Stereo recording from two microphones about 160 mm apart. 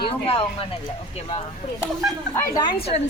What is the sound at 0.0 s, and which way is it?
Speech, 30° left (ahead or behind).